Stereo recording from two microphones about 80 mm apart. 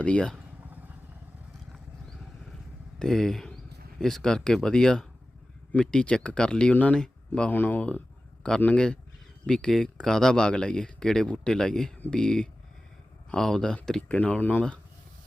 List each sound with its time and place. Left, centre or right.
0.0 s speech: centre
1.7 s vehicle: centre
3.0 s speech: centre
7.5 s speech: left; by 14.0 s centre
14.1 s speech: centre